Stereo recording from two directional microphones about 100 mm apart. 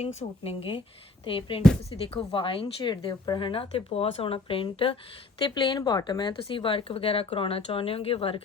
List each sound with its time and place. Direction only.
0.0 s speech: 85° left; by 2.9 s 60° left (ahead or behind)
2.9 s speech: 45° left (ahead or behind); by 4.9 s 65° left (ahead or behind)
5.5 s speech: 50° left (ahead or behind); by 8.4 s 70° left (ahead or behind)